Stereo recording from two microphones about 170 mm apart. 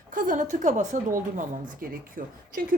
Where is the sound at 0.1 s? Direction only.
50° right (ahead or behind).